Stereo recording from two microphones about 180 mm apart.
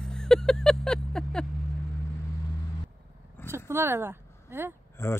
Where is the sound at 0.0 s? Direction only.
5° left (ahead or behind).